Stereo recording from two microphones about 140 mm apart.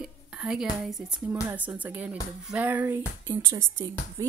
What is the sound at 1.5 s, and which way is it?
Speech, 10° right (ahead or behind).